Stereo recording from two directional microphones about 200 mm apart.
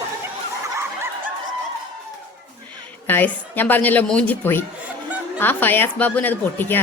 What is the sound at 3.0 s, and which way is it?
A woman's voice, 10° left (ahead or behind).